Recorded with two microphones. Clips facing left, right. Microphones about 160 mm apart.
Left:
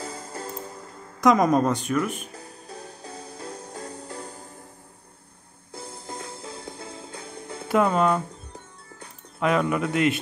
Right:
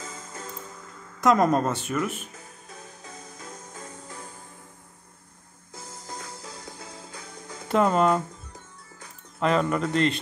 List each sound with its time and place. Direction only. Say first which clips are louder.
0.0 s music: left 5 dB; 35° left (ahead or behind)
1.2 s a woman's voice: left 2 dB; centre (ahead or behind)
2.3 s music: left 5 dB; 35° left (ahead or behind)
5.7 s music: left 3 dB; 30° left (ahead or behind)
7.6 s music: left 1 dB; 5° left (ahead or behind)
7.9 s speech: even; 5° right (ahead or behind)
9.4 s speech: left 1 dB; 5° left (ahead or behind)